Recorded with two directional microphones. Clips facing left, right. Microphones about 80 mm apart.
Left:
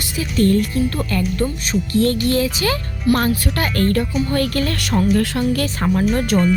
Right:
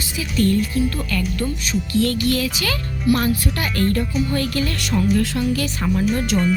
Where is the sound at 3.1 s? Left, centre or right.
Left.